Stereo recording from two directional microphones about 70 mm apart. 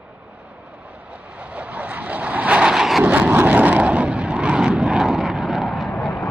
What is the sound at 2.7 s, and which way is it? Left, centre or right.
Vehicle, centre.